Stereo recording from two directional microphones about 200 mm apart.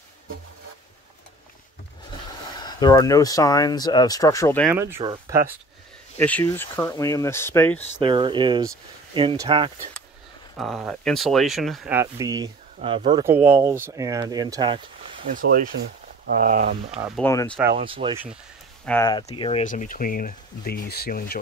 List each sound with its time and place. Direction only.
2.6 s speech: 20° left (ahead or behind)
4.6 s speech: 10° right (ahead or behind)
6.1 s speech: 10° left (ahead or behind)
8.0 s speech: 25° right (ahead or behind)
10.6 s speech: centre (ahead or behind); by 12.4 s 15° right (ahead or behind)
12.8 s speech: 25° right (ahead or behind)
13.5 s speech: 15° right (ahead or behind)
15.3 s speech: 45° right (ahead or behind)
17.2 s speech: 10° left (ahead or behind)
17.7 s speech: 25° right (ahead or behind)
18.9 s speech: 5° left (ahead or behind)
19.2 s speech: 25° left (ahead or behind)
19.6 s speech: 40° left (ahead or behind)